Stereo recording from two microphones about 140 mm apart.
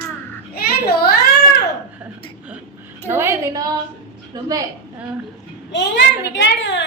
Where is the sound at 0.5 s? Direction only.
90° left.